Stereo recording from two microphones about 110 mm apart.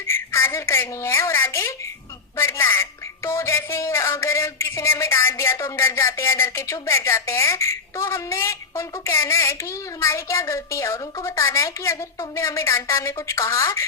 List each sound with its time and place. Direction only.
0.1 s a woman's voice: 25° left (ahead or behind)